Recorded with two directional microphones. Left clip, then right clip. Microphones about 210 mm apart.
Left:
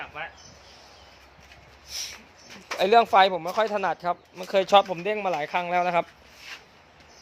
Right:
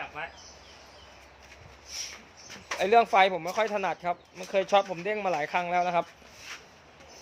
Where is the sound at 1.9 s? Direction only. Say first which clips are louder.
Left 4 dB; 50° left (ahead or behind).